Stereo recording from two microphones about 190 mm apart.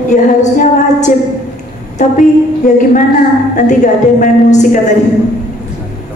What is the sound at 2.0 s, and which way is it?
A woman's voice, 40° left (ahead or behind).